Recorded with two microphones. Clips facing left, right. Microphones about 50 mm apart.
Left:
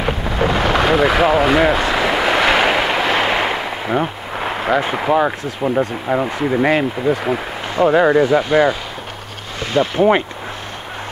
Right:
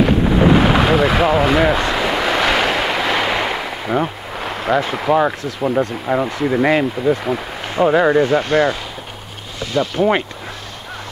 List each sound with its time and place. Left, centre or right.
0.0 s wind noise: centre
5.1 s speech: centre
7.8 s speech: centre
9.7 s speech: left